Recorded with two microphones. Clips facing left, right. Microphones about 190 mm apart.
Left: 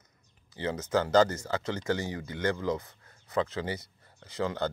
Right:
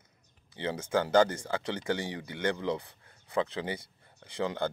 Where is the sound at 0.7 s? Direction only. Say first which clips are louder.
Left 1 dB; 10° right (ahead or behind).